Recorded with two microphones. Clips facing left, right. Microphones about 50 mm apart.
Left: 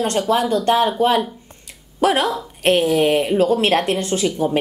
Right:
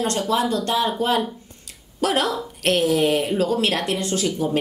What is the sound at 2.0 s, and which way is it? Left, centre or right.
A woman's voice, left.